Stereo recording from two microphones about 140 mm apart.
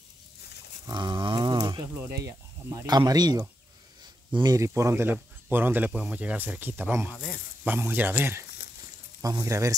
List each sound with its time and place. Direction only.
0.8 s a sound: 30° right (ahead or behind)
2.0 s speech: 20° right (ahead or behind)
4.6 s speech: 20° right (ahead or behind)